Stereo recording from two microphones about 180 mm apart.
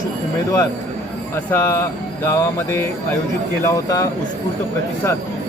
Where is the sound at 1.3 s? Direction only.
15° left (ahead or behind).